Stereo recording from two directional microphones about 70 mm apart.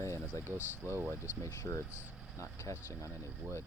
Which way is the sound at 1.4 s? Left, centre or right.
Left.